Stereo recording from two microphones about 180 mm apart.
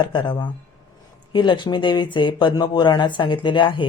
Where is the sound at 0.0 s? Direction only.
25° left (ahead or behind).